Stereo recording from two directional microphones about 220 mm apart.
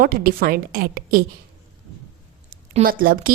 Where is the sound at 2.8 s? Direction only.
40° right (ahead or behind).